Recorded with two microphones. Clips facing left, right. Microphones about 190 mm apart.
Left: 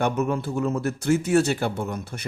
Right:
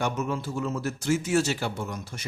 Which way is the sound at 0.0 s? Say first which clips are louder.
Left 5 dB; 60° left (ahead or behind).